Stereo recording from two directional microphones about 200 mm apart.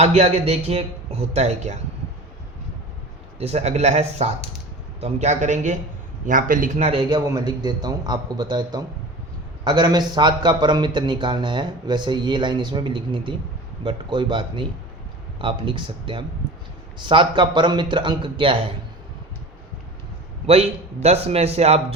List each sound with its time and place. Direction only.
0.0 s speech: 35° right (ahead or behind)
3.3 s a man's voice: 30° right (ahead or behind)
20.5 s speech: 30° right (ahead or behind)